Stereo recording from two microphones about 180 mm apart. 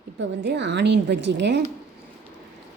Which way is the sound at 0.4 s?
75° right (ahead or behind).